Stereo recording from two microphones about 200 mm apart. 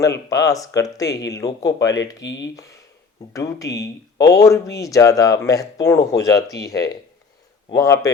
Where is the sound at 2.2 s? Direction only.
65° left (ahead or behind).